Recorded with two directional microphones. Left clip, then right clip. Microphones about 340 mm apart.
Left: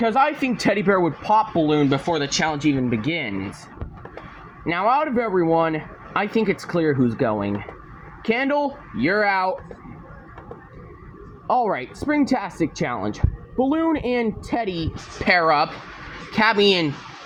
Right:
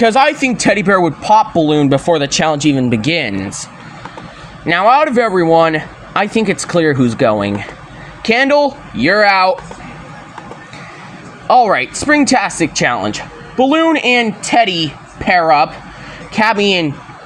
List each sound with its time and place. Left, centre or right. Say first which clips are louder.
0.3 s speech: right 8 dB; left
4.6 s speech: right 10 dB; left
11.4 s a woman's voice: right 11 dB; left